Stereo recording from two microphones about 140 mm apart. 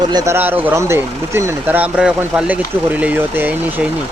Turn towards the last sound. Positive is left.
turn(degrees=-15)  # may be behind; listen again after turning